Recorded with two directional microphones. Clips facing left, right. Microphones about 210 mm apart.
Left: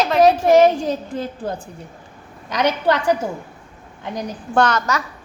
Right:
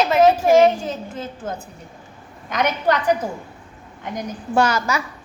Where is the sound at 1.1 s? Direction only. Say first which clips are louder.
Left 4 dB; 35° left (ahead or behind).